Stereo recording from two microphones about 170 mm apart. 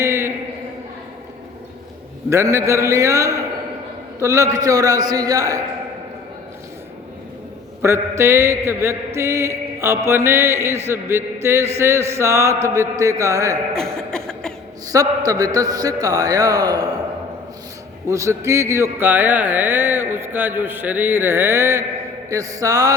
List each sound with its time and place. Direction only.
0.0 s a sound: 15° right (ahead or behind)
2.3 s mantra: 15° right (ahead or behind)
4.2 s a man's voice: 20° right (ahead or behind)
7.8 s mantra: 15° right (ahead or behind)
13.7 s cough: 5° left (ahead or behind)
14.8 s a man's voice: 20° right (ahead or behind)
18.1 s mantra: 15° right (ahead or behind)
22.3 s a man's voice: 20° right (ahead or behind)